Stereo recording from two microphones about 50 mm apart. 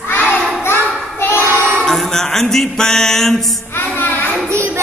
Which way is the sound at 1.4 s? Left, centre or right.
Right.